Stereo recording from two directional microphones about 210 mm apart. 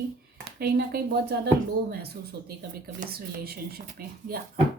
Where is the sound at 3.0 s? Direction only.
45° right (ahead or behind).